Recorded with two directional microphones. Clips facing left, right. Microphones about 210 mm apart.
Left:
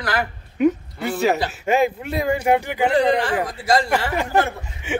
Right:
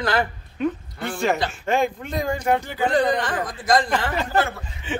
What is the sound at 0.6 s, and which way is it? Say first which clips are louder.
A woman's voice: left 6 dB; 10° left (ahead or behind).